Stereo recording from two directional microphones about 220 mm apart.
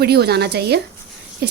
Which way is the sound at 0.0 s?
45° right (ahead or behind).